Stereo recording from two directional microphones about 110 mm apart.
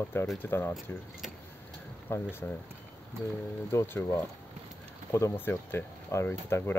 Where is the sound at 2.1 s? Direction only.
20° left (ahead or behind).